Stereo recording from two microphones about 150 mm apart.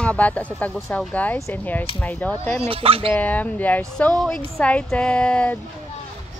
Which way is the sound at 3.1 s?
10° left (ahead or behind).